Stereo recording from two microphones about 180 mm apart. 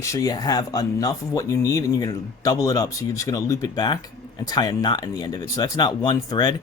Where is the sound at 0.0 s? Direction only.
20° left (ahead or behind).